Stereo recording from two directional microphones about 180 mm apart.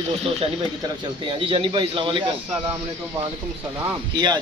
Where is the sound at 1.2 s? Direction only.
30° right (ahead or behind).